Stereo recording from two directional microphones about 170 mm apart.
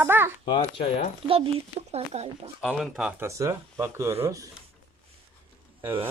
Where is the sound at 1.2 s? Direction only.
35° right (ahead or behind).